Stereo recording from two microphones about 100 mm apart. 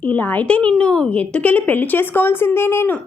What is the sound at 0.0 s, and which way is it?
A woman's voice, 15° left (ahead or behind).